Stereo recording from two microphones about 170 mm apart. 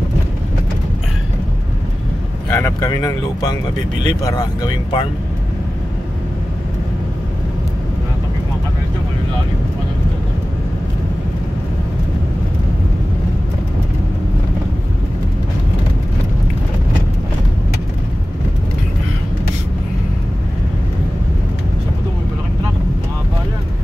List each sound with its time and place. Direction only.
2.5 s speech: 20° left (ahead or behind)